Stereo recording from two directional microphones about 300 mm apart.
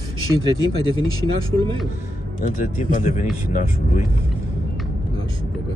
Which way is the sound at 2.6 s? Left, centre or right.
Left.